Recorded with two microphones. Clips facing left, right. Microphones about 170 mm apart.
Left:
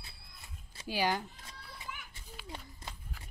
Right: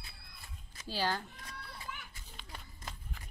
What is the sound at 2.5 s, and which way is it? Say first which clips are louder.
Run: left 2 dB; 25° left (ahead or behind).